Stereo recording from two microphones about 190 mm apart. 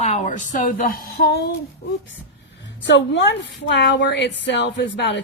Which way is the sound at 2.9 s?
70° left (ahead or behind).